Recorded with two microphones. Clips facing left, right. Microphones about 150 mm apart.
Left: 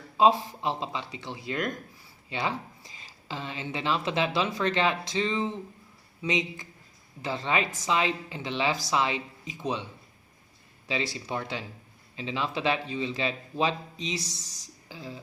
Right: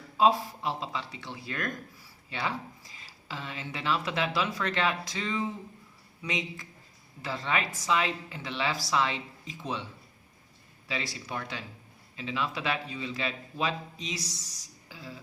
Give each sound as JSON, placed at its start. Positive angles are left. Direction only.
{"t": 0.2, "sound": "speech", "side_deg": 20}
{"t": 10.8, "sound": "speech", "side_deg": 20}